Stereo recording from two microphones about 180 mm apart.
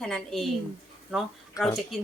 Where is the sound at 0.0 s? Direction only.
Centre (ahead or behind).